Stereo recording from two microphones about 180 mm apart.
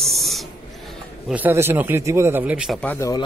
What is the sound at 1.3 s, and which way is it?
Speech, 10° right (ahead or behind).